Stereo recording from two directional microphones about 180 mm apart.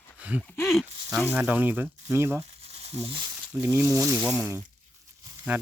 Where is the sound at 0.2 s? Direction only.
10° right (ahead or behind).